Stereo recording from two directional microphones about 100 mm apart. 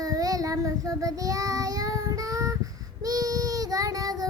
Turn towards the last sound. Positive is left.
turn(degrees=-40)  # may be behind; listen again after turning